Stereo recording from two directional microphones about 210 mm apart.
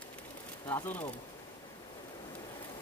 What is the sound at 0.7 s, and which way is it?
Speech, 10° left (ahead or behind).